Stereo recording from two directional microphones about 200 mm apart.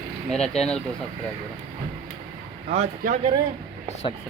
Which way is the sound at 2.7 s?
35° right (ahead or behind).